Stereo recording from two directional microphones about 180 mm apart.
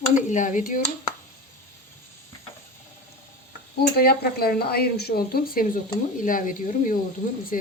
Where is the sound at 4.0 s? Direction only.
60° left (ahead or behind).